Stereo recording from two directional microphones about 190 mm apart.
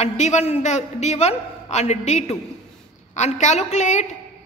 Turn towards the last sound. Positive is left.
turn(degrees=40)  # may be behind; listen again after turning